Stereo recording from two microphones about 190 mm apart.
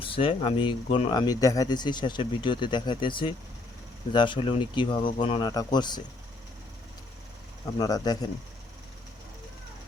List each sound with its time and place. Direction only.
0.0 s speech: 30° left (ahead or behind)
7.8 s speech: 20° left (ahead or behind)